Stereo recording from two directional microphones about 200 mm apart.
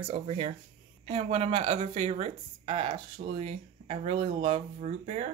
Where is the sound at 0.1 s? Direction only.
30° right (ahead or behind).